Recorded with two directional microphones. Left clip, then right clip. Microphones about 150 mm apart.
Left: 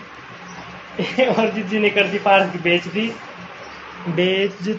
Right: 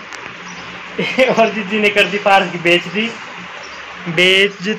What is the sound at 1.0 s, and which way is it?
Speech, 35° right (ahead or behind).